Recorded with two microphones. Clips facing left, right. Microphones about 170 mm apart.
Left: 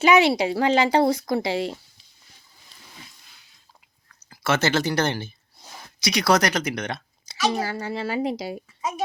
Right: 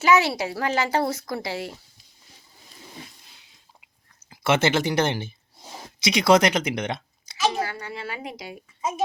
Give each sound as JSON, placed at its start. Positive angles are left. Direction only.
{"t": 0.0, "sound": "speech", "side_deg": 20}
{"t": 4.3, "sound": "speech", "side_deg": -25}
{"t": 7.3, "sound": "speech", "side_deg": 30}